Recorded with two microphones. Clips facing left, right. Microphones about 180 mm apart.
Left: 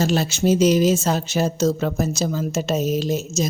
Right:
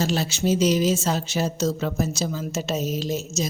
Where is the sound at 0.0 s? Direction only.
50° left (ahead or behind).